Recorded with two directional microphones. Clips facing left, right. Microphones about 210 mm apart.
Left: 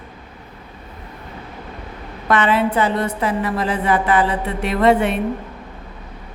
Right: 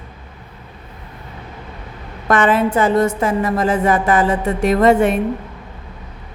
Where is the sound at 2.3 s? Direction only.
45° right (ahead or behind).